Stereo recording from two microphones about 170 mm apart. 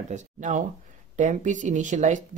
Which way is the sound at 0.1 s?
45° right (ahead or behind).